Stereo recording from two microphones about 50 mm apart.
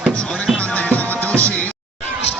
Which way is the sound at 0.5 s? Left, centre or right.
Left.